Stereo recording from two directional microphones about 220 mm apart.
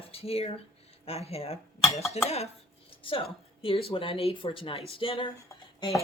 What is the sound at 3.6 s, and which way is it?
Speech, 25° left (ahead or behind).